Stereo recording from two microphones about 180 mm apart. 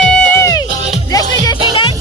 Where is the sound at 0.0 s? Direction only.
5° left (ahead or behind).